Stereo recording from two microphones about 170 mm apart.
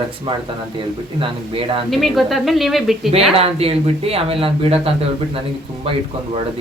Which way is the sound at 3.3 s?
35° right (ahead or behind).